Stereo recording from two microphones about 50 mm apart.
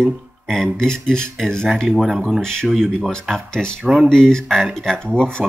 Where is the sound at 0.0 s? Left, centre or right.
Centre.